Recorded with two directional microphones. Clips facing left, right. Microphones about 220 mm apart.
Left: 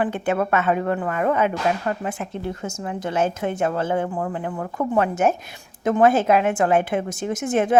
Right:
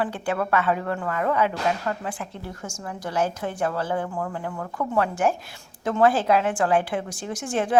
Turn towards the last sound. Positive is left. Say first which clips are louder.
# left 4 dB
turn(degrees=20)  # may be behind; listen again after turning